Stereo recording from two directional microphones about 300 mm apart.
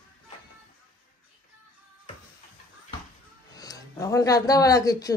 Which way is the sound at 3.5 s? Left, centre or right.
Centre.